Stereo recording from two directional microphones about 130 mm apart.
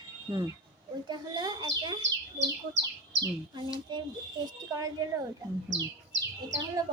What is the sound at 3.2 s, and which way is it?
Speech, 35° right (ahead or behind).